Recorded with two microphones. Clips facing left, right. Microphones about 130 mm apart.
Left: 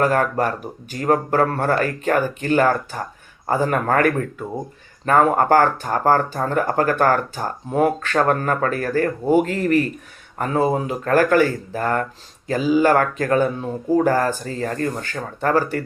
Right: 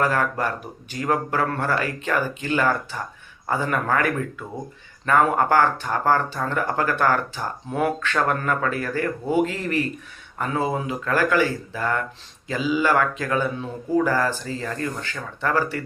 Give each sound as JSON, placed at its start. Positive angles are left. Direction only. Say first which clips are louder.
{"t": 0.0, "sound": "speech", "louder": "left 4 dB", "side_deg": 45}